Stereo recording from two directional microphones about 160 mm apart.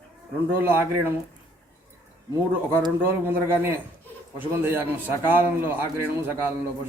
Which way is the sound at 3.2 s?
10° right (ahead or behind).